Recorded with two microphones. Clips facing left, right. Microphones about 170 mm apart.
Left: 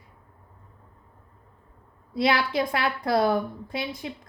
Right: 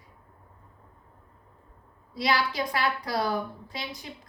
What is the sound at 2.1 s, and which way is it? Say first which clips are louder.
A woman's voice: left 4 dB; 55° left (ahead or behind).